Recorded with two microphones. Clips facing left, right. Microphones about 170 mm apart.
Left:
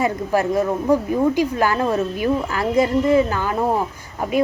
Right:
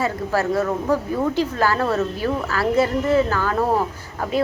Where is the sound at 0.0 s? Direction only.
15° left (ahead or behind).